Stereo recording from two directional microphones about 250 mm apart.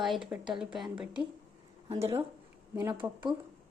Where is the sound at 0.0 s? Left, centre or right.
Centre.